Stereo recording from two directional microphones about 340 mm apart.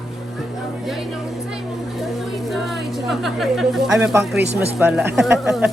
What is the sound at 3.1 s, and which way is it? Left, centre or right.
Speech, centre.